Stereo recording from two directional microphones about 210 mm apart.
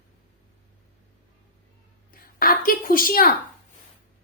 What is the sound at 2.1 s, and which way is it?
A woman's voice, 45° left (ahead or behind).